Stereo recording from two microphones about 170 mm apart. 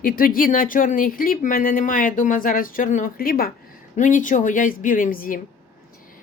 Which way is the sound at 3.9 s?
50° left (ahead or behind).